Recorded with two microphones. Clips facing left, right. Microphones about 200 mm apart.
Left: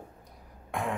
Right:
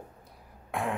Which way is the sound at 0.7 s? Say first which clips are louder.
Right 1 dB; centre (ahead or behind).